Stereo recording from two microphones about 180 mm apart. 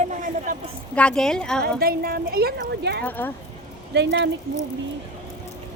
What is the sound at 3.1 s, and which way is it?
Speech, 10° left (ahead or behind).